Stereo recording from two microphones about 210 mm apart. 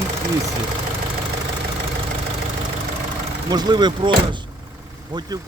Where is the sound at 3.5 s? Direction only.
20° right (ahead or behind).